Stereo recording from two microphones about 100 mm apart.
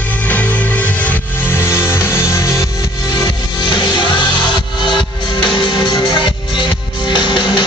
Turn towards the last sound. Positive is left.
turn(degrees=50)  # may be behind; listen again after turning